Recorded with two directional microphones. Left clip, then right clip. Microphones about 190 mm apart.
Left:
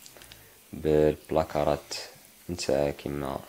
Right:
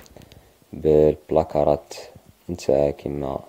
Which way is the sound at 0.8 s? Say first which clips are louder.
Right 7 dB; 40° right (ahead or behind).